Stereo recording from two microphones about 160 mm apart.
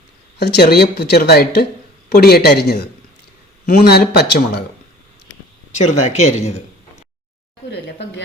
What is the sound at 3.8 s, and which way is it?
Speech, 90° left.